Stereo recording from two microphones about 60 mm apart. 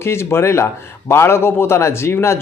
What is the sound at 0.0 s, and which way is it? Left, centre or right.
A man's voice, left.